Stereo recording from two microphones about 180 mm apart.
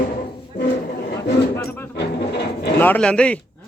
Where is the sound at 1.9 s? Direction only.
70° left (ahead or behind).